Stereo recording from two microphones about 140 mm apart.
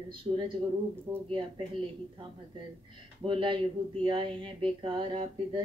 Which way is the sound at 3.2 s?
35° right (ahead or behind).